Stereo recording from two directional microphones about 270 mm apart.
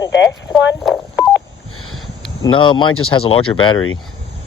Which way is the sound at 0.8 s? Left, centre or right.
Centre.